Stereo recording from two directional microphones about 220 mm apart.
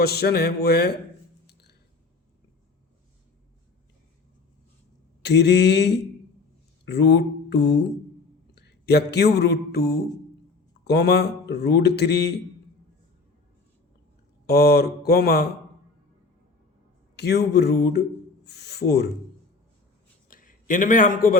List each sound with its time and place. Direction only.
0.0 s speech: 45° left (ahead or behind)
1.5 s a sound: 50° left (ahead or behind)
5.2 s speech: 50° left (ahead or behind)
14.4 s speech: 45° left (ahead or behind)
17.2 s speech: 50° left (ahead or behind)
20.2 s a sound: 40° left (ahead or behind)